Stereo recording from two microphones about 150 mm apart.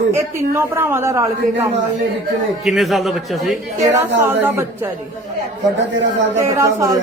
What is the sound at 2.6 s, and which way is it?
Speech, centre (ahead or behind).